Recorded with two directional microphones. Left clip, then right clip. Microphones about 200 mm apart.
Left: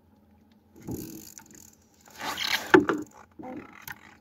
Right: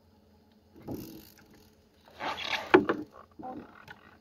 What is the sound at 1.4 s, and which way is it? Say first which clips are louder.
Ratchet: left 8 dB; 55° left (ahead or behind).